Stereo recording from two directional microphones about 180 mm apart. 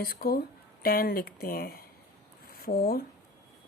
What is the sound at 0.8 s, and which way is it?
Speech, 55° left (ahead or behind).